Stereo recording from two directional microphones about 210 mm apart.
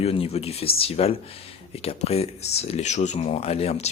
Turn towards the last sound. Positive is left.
turn(degrees=30)  # may be behind; listen again after turning